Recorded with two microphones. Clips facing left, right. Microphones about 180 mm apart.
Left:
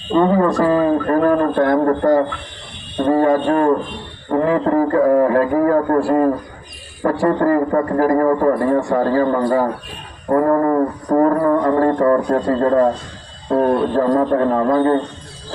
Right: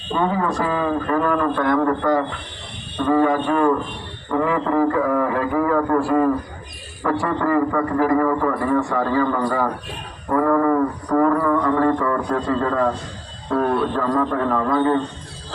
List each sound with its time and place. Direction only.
0.2 s a man's voice: 40° left (ahead or behind)